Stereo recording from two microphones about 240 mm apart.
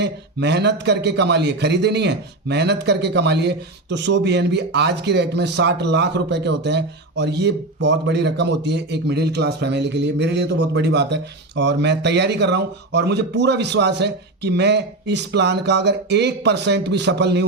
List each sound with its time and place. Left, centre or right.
0.0 s a man's voice: right